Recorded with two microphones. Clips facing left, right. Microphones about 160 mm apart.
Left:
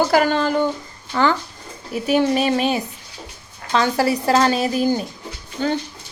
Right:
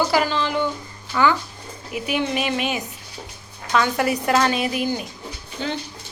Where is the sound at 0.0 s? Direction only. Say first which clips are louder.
Left 4 dB; 50° left (ahead or behind).